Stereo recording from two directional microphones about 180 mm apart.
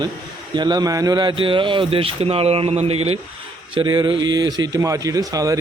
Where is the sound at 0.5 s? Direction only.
25° right (ahead or behind).